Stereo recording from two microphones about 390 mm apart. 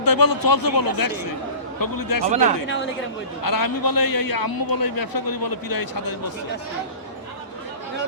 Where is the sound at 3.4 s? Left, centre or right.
Left.